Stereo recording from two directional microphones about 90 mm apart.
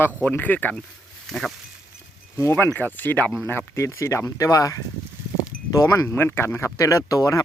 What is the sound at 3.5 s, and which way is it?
Speech, 30° left (ahead or behind).